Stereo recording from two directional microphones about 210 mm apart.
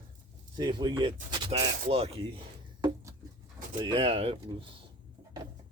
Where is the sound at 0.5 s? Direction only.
20° right (ahead or behind).